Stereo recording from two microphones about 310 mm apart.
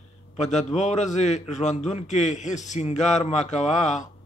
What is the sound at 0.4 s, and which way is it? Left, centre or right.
A man's voice, left.